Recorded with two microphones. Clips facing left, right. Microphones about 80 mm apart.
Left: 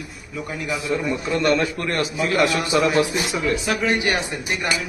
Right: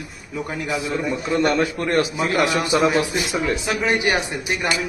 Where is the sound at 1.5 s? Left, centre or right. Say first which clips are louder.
Right 3 dB; right.